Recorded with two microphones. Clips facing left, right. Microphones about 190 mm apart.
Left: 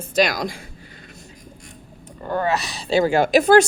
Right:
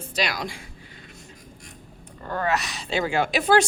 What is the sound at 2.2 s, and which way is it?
Speech, 25° left (ahead or behind).